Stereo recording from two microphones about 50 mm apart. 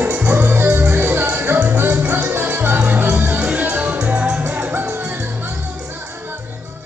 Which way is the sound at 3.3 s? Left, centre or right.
Right.